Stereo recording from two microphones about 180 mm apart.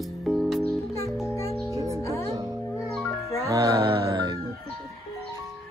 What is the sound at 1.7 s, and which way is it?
Music, 15° right (ahead or behind).